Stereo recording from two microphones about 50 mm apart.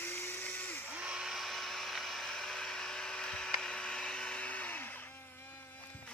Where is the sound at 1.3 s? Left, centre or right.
Centre; by 4.8 s left.